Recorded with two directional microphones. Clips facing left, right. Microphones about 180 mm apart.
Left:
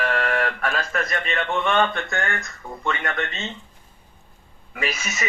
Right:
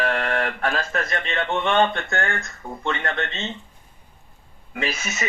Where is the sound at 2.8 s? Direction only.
25° right (ahead or behind).